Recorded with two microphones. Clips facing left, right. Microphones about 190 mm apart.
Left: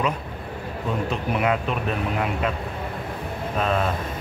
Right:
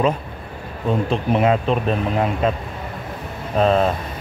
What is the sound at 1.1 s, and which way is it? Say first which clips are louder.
Speech: right 6 dB; 30° right (ahead or behind).